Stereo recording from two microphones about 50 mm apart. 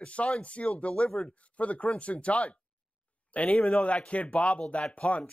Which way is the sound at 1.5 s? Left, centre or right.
Left.